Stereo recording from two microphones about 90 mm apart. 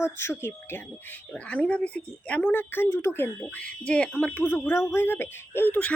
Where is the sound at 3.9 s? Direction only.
10° left (ahead or behind).